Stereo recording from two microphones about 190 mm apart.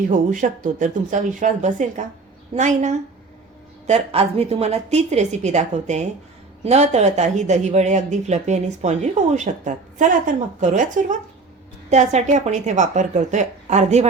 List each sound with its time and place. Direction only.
0.1 s speech: 45° right (ahead or behind)